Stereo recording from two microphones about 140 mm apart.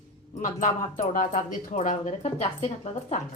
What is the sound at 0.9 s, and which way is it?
Speech, 70° left (ahead or behind).